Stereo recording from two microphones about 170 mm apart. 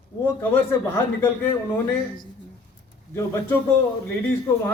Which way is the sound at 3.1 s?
15° left (ahead or behind).